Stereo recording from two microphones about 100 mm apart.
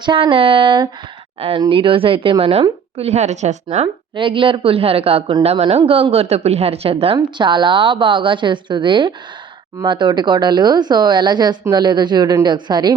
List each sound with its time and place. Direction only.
0.0 s speech: 55° right (ahead or behind)
1.4 s speech: 70° right (ahead or behind)
2.4 s a woman's voice: 85° right
3.4 s a woman's voice: 90° right
4.1 s speech: 55° right (ahead or behind); by 5.2 s 75° right (ahead or behind)
5.4 s a woman's voice: 90° right; by 7.2 s 75° right (ahead or behind)
7.2 s a woman's voice: 50° right (ahead or behind)